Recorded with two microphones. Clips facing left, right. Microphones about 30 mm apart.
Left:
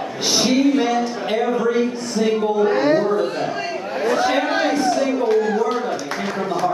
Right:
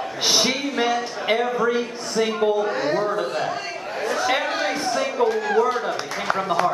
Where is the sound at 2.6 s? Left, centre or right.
Centre.